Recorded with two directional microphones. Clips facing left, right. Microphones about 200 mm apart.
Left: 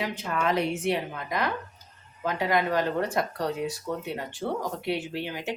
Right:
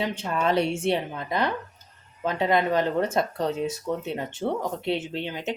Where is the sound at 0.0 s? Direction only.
25° right (ahead or behind).